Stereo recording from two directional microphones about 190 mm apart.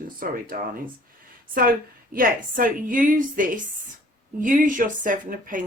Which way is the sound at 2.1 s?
50° right (ahead or behind).